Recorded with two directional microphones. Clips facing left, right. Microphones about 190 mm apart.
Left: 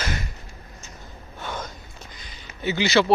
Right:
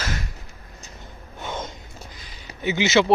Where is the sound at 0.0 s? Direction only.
Centre (ahead or behind).